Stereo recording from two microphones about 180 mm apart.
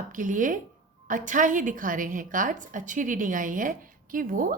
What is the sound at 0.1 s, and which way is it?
A woman's voice, 45° right (ahead or behind).